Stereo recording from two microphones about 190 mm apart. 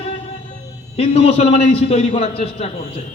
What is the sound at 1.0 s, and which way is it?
A man's voice, 35° left (ahead or behind).